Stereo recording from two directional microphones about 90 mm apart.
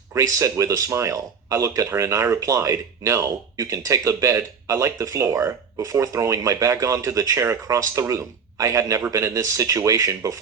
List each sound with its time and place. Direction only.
0.1 s speech: 35° right (ahead or behind)